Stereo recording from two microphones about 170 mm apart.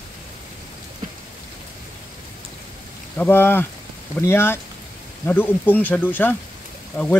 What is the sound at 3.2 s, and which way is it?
A man's voice, 15° left (ahead or behind).